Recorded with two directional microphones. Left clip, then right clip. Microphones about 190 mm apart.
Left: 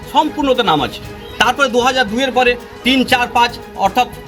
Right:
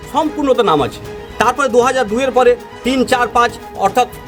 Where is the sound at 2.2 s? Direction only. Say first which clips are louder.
Right 5 dB; 20° right (ahead or behind).